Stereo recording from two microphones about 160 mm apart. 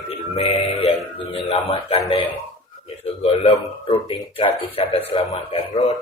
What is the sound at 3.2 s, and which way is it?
Speech, 30° left (ahead or behind).